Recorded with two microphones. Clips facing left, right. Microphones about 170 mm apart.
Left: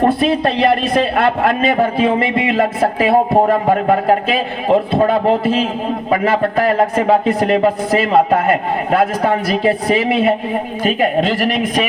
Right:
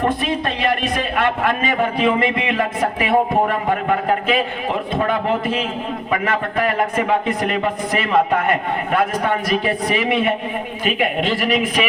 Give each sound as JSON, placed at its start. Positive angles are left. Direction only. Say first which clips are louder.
{"t": 0.0, "sound": "a man's voice", "louder": "left 6 dB", "side_deg": 35}